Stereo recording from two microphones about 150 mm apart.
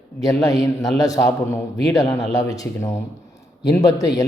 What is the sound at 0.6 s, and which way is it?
A man's voice, 25° left (ahead or behind).